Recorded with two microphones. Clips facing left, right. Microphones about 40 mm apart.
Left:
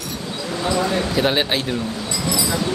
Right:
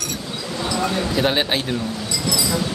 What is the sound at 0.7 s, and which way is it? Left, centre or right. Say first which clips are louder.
Speech: left 2 dB; left.